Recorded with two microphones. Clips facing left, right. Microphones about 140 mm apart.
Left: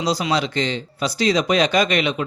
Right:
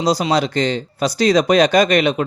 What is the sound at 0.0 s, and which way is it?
Speech, 40° right (ahead or behind).